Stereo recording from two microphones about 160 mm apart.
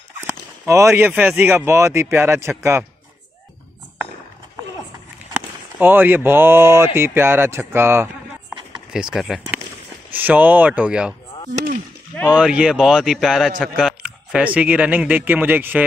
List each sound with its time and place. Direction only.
0.3 s a man's voice: 20° right (ahead or behind)
5.8 s a man's voice: 10° right (ahead or behind)
8.9 s a man's voice: 5° right (ahead or behind)
12.3 s a man's voice: 5° right (ahead or behind)